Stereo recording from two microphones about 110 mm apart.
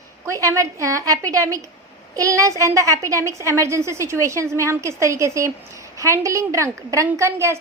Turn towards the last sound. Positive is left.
turn(degrees=-25)  # may be behind; listen again after turning